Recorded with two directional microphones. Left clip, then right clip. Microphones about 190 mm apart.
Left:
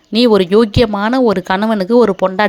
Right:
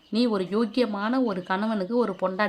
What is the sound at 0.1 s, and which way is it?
Speech, 40° left (ahead or behind).